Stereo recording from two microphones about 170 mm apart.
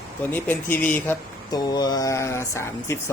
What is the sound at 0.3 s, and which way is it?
Speech, 10° left (ahead or behind).